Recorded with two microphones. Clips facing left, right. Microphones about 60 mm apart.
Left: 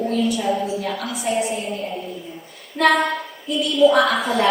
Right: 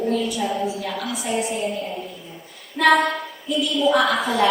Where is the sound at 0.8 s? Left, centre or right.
Left.